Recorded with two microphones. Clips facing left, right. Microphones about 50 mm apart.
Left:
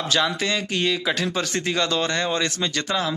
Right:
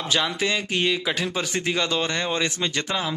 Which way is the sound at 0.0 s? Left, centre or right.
Centre.